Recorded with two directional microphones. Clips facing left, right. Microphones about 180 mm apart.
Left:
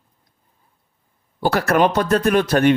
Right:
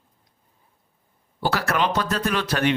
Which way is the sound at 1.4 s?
50° left (ahead or behind).